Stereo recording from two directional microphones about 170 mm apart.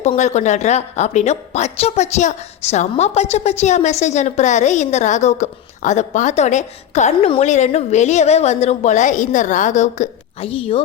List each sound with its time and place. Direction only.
0.0 s a woman's voice: 40° left (ahead or behind)